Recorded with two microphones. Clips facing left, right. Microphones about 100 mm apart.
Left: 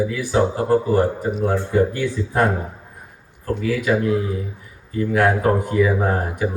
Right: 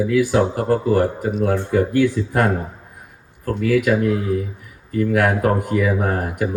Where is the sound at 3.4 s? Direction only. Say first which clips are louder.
Right 3 dB; 60° right (ahead or behind).